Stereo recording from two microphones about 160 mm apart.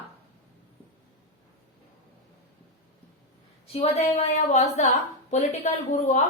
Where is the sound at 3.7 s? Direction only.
40° left (ahead or behind).